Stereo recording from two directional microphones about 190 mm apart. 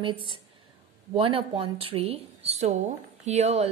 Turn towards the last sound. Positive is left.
turn(degrees=-35)  # may be behind; listen again after turning